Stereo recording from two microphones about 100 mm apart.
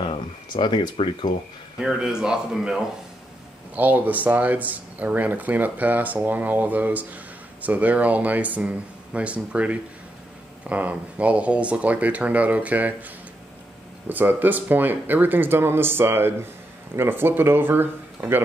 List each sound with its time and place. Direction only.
0.0 s speech: 55° left (ahead or behind)
1.8 s speech: 5° right (ahead or behind)
14.0 s speech: 20° right (ahead or behind)